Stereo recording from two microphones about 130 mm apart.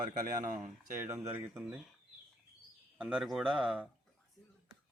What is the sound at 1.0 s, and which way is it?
Speech, 15° right (ahead or behind).